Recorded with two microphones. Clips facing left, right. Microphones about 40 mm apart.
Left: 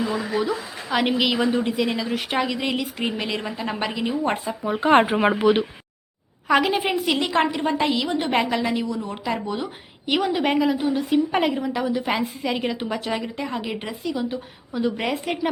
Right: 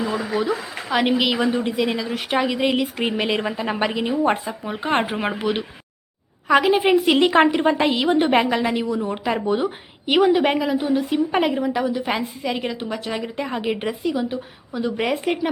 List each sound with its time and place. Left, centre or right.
0.1 s a woman's voice: centre
2.5 s a woman's voice: centre
4.9 s speech: centre
6.5 s a woman's voice: centre
7.1 s speech: right
8.3 s a woman's voice: centre